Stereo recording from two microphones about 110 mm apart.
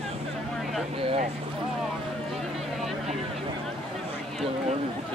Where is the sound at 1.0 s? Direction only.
60° right (ahead or behind).